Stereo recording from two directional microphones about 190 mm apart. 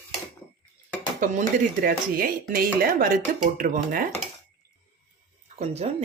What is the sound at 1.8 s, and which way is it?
Speech, 50° right (ahead or behind).